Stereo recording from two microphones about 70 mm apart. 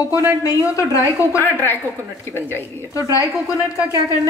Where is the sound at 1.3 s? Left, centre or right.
Left.